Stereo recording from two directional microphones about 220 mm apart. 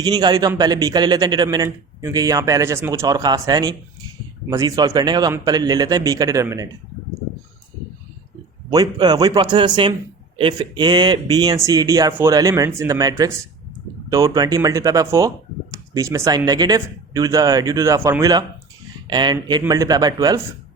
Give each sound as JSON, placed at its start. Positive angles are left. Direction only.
{"t": 0.0, "sound": "a man's voice", "side_deg": -20}
{"t": 8.7, "sound": "a man's voice", "side_deg": -20}